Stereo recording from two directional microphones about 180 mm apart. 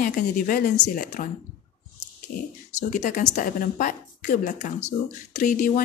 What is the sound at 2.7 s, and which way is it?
A woman's voice, 40° left (ahead or behind).